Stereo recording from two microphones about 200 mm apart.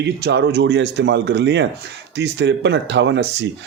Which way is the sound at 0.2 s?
60° right (ahead or behind).